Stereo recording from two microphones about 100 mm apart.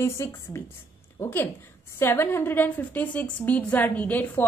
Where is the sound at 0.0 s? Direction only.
25° left (ahead or behind).